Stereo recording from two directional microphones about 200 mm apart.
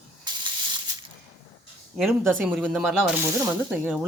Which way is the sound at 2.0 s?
Centre (ahead or behind).